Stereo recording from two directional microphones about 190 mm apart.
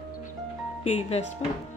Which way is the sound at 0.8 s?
35° left (ahead or behind).